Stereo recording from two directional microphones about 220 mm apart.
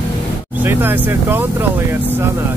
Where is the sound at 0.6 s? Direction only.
10° right (ahead or behind).